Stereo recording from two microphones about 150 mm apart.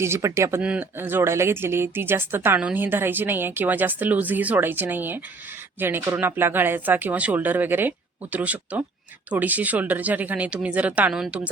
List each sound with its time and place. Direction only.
0.0 s speech: 20° right (ahead or behind)
0.6 s speech: 10° right (ahead or behind)